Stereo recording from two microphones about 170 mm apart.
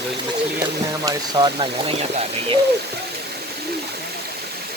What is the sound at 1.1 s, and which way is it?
Speech, 25° right (ahead or behind).